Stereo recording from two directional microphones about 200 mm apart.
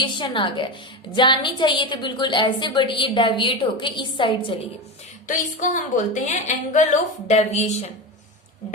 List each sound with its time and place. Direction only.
0.0 s a woman's voice: 25° left (ahead or behind)
5.3 s speech: 40° left (ahead or behind)